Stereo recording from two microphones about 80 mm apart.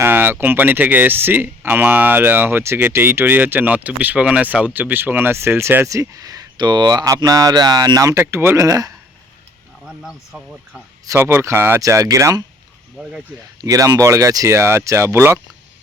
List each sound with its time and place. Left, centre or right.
0.0 s speech: right
8.1 s speech: right
8.6 s speech: right
9.8 s speech: centre
11.2 s speech: right
11.8 s speech: right
13.0 s speech: centre
13.6 s speech: right